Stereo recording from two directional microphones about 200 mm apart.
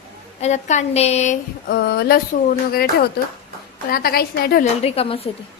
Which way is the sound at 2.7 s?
50° left (ahead or behind).